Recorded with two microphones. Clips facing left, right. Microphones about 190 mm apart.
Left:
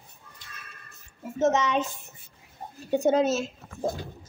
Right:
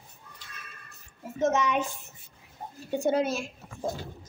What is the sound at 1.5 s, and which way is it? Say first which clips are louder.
Speech: left 1 dB; 20° left (ahead or behind).